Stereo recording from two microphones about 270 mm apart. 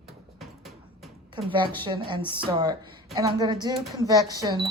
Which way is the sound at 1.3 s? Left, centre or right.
Centre.